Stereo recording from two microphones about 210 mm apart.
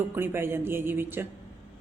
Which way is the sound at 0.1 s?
10° right (ahead or behind).